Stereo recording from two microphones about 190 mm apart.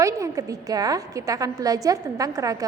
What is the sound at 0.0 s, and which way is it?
A woman's voice, 15° right (ahead or behind).